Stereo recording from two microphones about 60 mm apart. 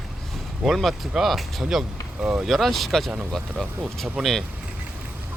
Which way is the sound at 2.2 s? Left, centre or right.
Centre.